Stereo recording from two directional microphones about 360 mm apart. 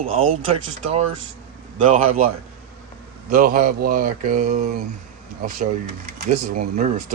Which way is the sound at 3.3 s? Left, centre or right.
Right.